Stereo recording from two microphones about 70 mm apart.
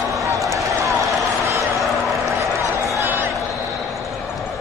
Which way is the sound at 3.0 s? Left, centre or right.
Right.